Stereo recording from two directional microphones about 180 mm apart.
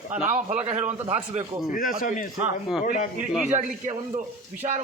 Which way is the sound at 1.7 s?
50° left (ahead or behind).